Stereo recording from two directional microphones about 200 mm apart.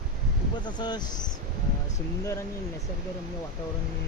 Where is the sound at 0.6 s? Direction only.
20° left (ahead or behind).